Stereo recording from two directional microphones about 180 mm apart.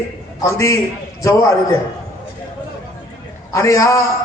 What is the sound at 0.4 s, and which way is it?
A man's voice, 15° left (ahead or behind).